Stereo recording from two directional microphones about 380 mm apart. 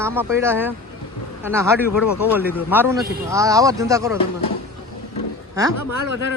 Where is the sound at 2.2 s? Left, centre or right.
Centre.